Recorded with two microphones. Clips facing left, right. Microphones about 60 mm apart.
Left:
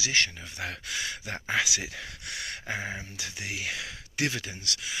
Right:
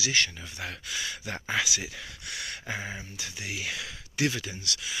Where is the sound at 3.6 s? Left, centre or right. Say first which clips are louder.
Left 1 dB; left.